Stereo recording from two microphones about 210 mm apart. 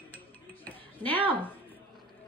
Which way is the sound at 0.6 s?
10° left (ahead or behind).